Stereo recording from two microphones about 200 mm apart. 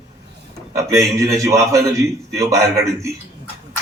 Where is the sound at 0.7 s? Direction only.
15° right (ahead or behind).